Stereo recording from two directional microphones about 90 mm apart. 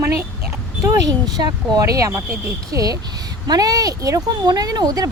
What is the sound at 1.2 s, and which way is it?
Speech, 50° right (ahead or behind).